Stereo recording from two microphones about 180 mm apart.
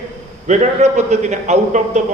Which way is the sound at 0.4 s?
40° right (ahead or behind).